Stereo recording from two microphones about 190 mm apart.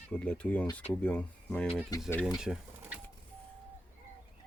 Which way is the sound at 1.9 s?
20° left (ahead or behind).